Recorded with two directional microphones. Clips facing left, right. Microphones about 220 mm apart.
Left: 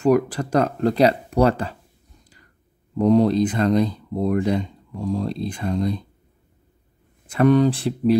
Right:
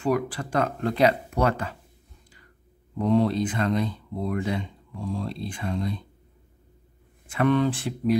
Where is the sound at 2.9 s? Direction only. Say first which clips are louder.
Left 6 dB; 40° left (ahead or behind).